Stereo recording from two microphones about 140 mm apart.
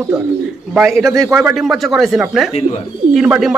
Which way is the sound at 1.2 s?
20° right (ahead or behind).